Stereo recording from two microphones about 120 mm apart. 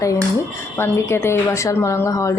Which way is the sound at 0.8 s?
20° left (ahead or behind).